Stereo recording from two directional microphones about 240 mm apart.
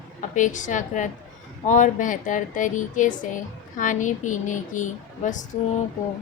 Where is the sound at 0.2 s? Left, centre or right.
Left.